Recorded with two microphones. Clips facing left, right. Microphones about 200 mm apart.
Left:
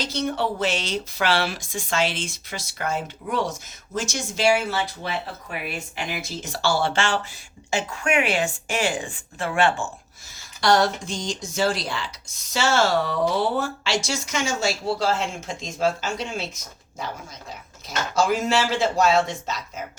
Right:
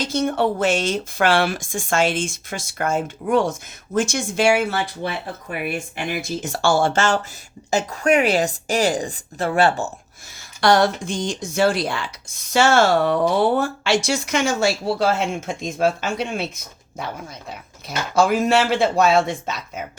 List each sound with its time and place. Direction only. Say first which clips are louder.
0.0 s a woman's voice: right 5 dB; 50° right (ahead or behind)
10.6 s speech: right 3 dB; 60° right (ahead or behind)
17.8 s speech: right 4 dB; 60° right (ahead or behind)